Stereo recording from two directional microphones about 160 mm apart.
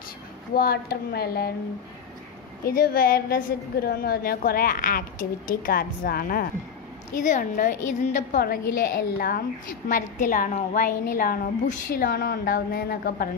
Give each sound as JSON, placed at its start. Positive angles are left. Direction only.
{"t": 0.6, "sound": "a woman's voice", "side_deg": 70}
{"t": 2.6, "sound": "a woman's voice", "side_deg": 70}
{"t": 7.2, "sound": "a woman's voice", "side_deg": 55}
{"t": 8.4, "sound": "a woman's voice", "side_deg": 70}
{"t": 9.8, "sound": "a woman's voice", "side_deg": 55}